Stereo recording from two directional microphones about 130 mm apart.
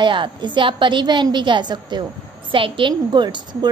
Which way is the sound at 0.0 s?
40° right (ahead or behind).